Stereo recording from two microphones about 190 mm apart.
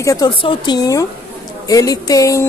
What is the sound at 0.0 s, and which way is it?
A woman's voice, 20° left (ahead or behind).